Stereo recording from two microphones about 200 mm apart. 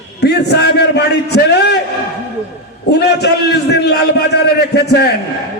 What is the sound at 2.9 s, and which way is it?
A man's voice, 55° left (ahead or behind).